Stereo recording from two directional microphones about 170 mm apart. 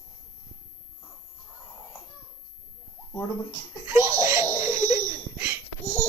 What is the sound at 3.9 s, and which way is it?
Laughter, 20° right (ahead or behind).